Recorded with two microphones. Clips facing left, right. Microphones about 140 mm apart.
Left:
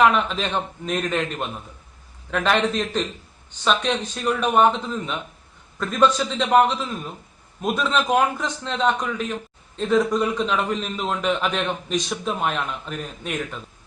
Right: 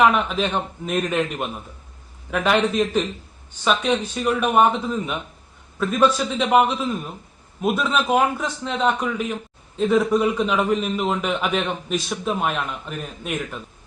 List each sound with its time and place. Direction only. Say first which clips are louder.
0.0 s a man's voice: right 1 dB; 5° right (ahead or behind)